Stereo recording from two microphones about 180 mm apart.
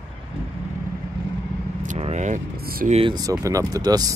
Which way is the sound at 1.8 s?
40° right (ahead or behind).